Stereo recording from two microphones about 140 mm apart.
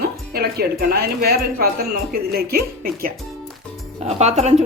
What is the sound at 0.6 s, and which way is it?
Speech, 90° right.